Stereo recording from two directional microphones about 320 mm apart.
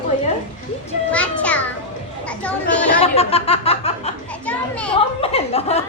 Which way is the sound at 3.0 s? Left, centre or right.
Centre.